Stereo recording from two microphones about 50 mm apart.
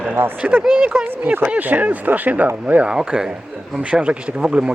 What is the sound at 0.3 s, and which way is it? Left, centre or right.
Speech, right.